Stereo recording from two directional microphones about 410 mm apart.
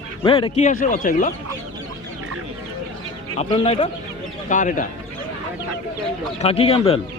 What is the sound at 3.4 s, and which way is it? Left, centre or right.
A man's voice, centre.